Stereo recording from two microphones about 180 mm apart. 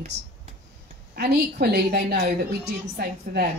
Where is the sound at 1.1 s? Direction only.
60° right (ahead or behind).